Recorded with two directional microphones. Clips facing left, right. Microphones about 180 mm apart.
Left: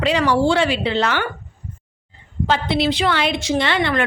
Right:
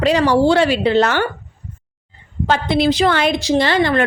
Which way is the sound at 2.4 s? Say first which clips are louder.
Right 3 dB; 45° right (ahead or behind).